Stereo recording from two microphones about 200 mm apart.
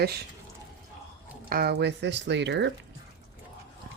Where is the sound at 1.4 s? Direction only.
50° right (ahead or behind).